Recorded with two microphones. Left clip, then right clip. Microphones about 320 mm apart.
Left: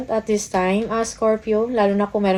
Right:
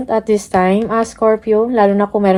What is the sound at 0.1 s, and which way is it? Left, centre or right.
Speech, right.